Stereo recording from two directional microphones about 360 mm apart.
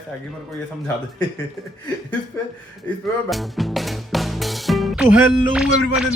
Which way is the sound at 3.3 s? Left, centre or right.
Centre.